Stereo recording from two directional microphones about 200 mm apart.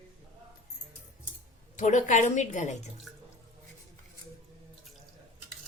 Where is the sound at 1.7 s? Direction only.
40° left (ahead or behind).